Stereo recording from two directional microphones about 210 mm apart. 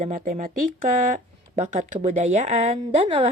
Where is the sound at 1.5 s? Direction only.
35° right (ahead or behind).